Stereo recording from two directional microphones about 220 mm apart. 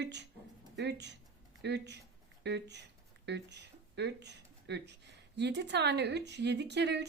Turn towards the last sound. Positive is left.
turn(degrees=-50)  # may be behind; listen again after turning